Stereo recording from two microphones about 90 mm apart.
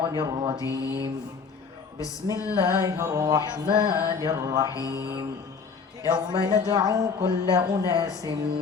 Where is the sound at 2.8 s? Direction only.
35° right (ahead or behind).